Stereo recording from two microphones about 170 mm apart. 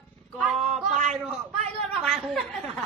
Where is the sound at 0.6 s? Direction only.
45° right (ahead or behind).